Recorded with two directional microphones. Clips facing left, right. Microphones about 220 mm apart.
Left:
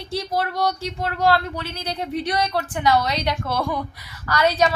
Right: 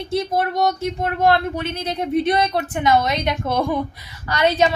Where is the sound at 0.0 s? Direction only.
20° right (ahead or behind).